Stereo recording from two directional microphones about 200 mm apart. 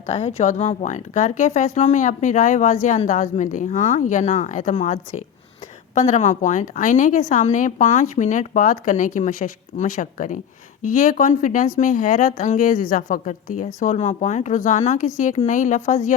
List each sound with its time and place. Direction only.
0.0 s a woman's voice: 35° left (ahead or behind)